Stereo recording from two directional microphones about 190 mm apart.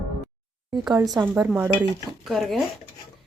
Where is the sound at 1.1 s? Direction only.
10° right (ahead or behind).